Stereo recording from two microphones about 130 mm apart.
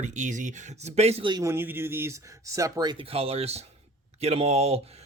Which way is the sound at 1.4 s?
20° right (ahead or behind).